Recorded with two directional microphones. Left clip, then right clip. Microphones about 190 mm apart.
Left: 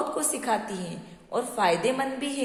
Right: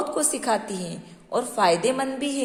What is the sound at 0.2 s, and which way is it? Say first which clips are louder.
A woman's voice: right 3 dB; 25° right (ahead or behind).